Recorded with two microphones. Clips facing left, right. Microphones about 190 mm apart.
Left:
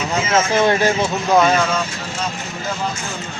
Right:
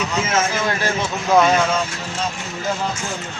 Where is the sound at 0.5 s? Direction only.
25° left (ahead or behind).